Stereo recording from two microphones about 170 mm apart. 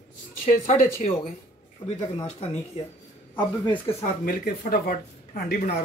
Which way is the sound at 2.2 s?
40° left (ahead or behind).